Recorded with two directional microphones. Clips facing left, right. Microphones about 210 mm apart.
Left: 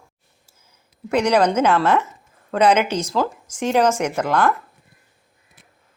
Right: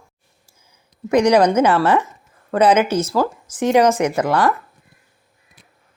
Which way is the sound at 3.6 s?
10° right (ahead or behind).